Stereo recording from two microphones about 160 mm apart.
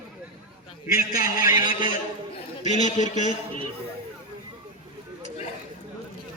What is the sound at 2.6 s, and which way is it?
Speech, 50° left (ahead or behind).